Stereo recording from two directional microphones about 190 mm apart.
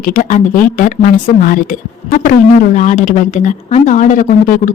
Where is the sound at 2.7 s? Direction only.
40° left (ahead or behind).